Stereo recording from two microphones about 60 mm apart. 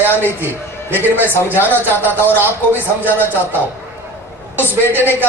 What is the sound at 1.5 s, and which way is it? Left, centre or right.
A man's voice, left.